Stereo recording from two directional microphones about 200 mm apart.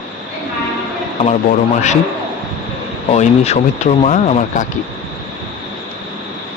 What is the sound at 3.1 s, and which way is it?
Speech, 35° left (ahead or behind).